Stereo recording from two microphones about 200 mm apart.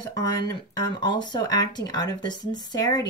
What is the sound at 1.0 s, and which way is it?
Speech, 20° left (ahead or behind).